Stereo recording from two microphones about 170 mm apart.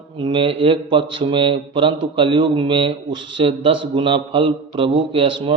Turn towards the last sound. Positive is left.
turn(degrees=-30)  # may be behind; listen again after turning